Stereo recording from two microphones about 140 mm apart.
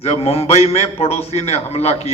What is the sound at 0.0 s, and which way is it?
A man's voice, 45° left (ahead or behind).